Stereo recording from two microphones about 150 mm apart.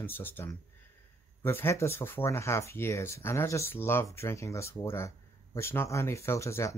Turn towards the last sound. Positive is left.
turn(degrees=20)  # may be behind; listen again after turning